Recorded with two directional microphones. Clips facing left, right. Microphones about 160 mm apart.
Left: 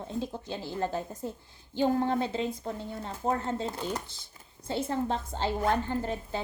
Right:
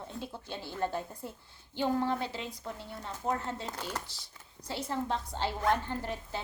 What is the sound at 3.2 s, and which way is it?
Speech, 30° left (ahead or behind).